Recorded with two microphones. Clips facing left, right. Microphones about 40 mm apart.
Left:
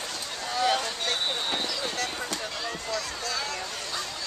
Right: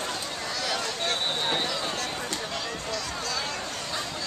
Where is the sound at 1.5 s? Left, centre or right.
Centre.